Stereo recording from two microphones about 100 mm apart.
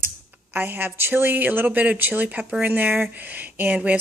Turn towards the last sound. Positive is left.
turn(degrees=-15)  # may be behind; listen again after turning